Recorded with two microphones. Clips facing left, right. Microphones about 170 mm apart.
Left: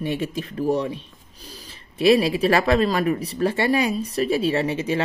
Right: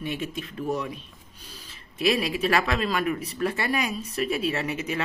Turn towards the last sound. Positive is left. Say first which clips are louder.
# left 6 dB
turn(degrees=30)  # may be behind; listen again after turning